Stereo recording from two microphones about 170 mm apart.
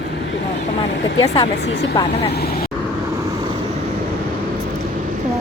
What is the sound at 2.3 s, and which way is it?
Speech, 65° left (ahead or behind).